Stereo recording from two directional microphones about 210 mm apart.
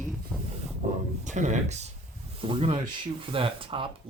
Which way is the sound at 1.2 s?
35° right (ahead or behind).